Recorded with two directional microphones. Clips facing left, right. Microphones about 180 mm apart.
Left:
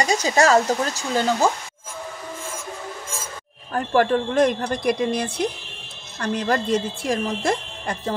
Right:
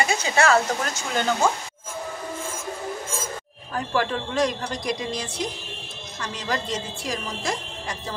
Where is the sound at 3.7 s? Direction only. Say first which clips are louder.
Left 6 dB; 50° left (ahead or behind).